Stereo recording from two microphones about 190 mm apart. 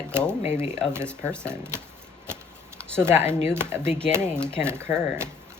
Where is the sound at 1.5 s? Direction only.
15° right (ahead or behind).